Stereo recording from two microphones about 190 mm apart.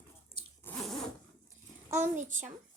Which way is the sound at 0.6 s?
5° left (ahead or behind).